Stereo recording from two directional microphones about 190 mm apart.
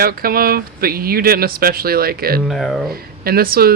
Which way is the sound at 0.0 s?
50° right (ahead or behind).